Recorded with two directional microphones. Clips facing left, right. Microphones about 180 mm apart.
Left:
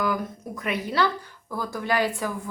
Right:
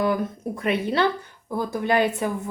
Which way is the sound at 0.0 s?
30° right (ahead or behind).